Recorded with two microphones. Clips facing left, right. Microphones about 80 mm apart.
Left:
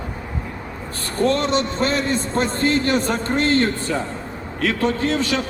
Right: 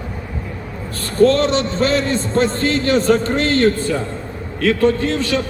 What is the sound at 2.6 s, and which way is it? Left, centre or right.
A man's voice, left.